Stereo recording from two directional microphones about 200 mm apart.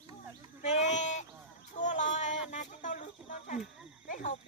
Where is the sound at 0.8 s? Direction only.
35° left (ahead or behind).